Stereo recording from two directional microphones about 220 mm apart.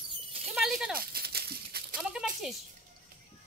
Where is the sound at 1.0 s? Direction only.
45° right (ahead or behind).